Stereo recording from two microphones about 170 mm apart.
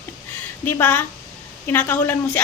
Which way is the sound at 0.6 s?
10° left (ahead or behind).